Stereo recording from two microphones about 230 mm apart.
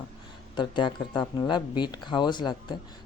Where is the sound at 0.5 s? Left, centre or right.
Left.